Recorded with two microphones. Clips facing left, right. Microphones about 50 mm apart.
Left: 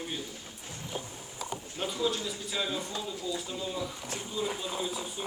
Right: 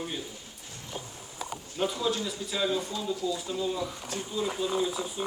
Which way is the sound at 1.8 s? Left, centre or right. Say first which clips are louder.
Right 3 dB; centre.